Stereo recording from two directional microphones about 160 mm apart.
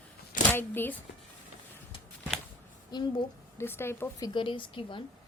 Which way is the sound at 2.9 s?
25° left (ahead or behind).